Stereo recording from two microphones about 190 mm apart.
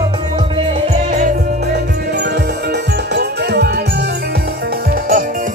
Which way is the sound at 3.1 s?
55° right (ahead or behind).